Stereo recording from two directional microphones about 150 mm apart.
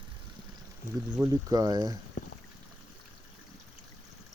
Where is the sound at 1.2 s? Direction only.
25° right (ahead or behind).